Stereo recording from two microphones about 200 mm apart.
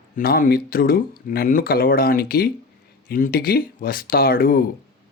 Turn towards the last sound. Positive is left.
turn(degrees=45)  # may be behind; listen again after turning